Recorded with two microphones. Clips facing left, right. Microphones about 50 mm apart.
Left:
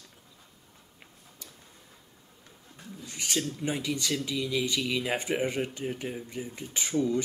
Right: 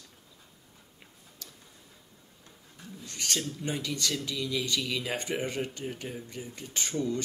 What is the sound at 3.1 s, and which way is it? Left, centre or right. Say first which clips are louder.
Speech: left 2 dB; centre.